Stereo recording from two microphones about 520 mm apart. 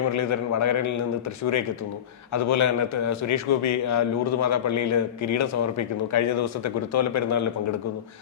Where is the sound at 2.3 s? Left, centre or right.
Left.